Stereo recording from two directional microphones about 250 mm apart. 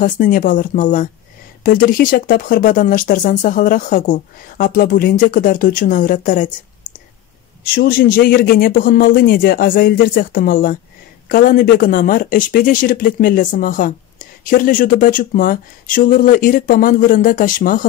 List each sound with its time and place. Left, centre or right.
0.0 s speech: left